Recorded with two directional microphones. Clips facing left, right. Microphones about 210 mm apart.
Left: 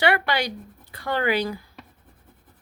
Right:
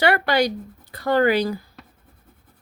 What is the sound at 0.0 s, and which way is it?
Speech, 40° right (ahead or behind).